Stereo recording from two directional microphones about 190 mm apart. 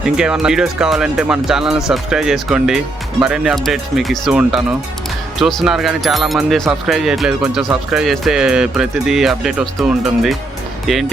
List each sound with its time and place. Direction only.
0.0 s speech: 5° right (ahead or behind)